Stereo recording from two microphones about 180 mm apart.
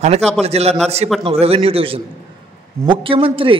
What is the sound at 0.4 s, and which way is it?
A man's voice, 35° right (ahead or behind).